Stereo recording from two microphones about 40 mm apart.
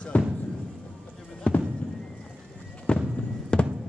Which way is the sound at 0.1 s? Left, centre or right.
Left.